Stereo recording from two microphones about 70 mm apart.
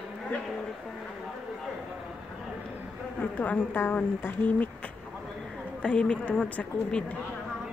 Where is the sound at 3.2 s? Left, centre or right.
Left.